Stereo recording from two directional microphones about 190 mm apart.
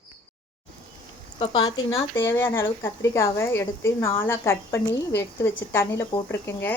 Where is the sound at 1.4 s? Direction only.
20° left (ahead or behind).